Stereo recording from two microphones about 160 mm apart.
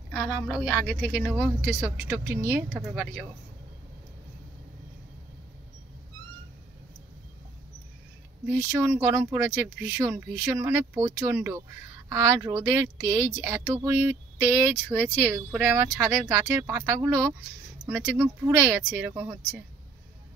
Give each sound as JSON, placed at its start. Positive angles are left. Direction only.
{"t": 0.1, "sound": "speech", "side_deg": 0}
{"t": 8.7, "sound": "speech", "side_deg": -15}